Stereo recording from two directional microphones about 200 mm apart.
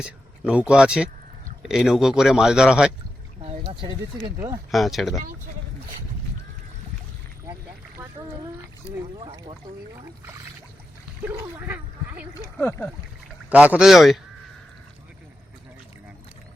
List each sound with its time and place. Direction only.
0.0 s speech: 5° right (ahead or behind)
3.4 s a sound: 30° right (ahead or behind)
4.4 s speech: 20° right (ahead or behind)
4.7 s speech: centre (ahead or behind)
9.1 s speech: 25° right (ahead or behind)
11.5 s gargling: 10° right (ahead or behind)
12.3 s speech: 15° left (ahead or behind)
13.5 s speech: 5° right (ahead or behind)